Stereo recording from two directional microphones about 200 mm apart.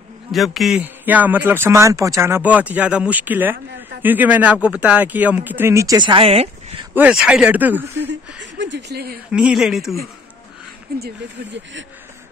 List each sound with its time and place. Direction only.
0.3 s a man's voice: centre (ahead or behind); by 6.9 s 30° right (ahead or behind)
6.9 s a man's voice: 5° right (ahead or behind)
8.0 s speech: 65° right (ahead or behind)
9.3 s speech: 5° right (ahead or behind)
10.9 s speech: 50° right (ahead or behind)